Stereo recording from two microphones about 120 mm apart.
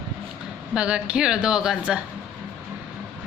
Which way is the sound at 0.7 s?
10° right (ahead or behind).